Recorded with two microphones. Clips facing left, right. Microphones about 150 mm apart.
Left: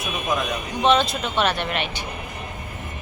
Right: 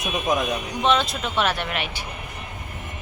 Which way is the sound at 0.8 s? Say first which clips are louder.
Left 3 dB; centre (ahead or behind).